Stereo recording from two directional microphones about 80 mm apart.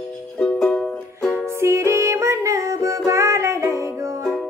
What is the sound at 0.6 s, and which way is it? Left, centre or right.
Music, centre.